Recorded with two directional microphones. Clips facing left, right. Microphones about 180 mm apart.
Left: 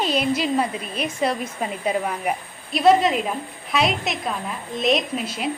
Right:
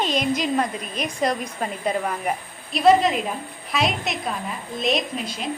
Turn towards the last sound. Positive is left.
turn(degrees=5)  # may be behind; listen again after turning